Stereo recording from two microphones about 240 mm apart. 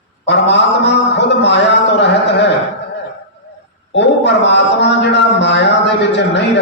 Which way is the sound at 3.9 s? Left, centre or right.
Left.